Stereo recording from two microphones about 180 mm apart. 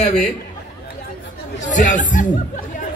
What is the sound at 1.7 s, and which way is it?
Speech, 45° left (ahead or behind).